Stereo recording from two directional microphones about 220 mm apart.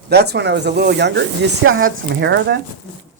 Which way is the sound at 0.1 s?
50° right (ahead or behind).